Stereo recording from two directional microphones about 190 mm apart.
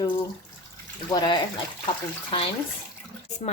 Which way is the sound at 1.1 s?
25° left (ahead or behind).